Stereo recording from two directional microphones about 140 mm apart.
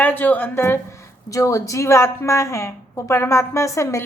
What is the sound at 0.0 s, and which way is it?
A woman's voice, 15° left (ahead or behind).